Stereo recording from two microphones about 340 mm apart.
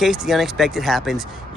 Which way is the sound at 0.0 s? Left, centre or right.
Centre.